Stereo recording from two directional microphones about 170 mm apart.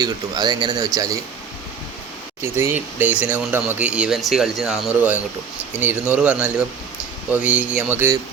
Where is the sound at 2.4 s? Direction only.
15° right (ahead or behind).